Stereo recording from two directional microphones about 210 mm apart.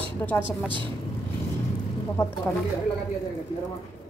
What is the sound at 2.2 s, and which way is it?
Speech, 10° left (ahead or behind).